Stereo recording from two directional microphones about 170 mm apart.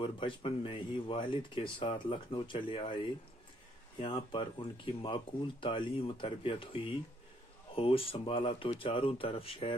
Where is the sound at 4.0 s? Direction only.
30° left (ahead or behind).